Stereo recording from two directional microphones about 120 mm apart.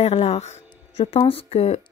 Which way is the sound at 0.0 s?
60° left (ahead or behind).